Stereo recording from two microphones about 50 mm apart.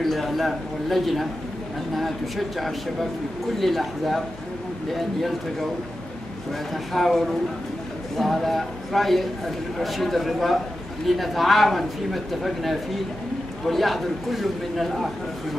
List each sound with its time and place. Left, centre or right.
0.0 s speech: centre
6.7 s speech: centre